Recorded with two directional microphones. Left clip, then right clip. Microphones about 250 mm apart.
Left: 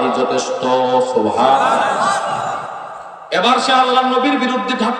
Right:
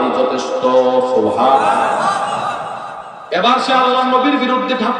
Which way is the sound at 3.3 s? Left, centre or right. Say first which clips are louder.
Even; left.